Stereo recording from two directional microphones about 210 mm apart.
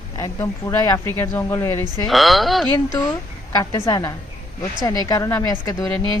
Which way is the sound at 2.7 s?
15° left (ahead or behind).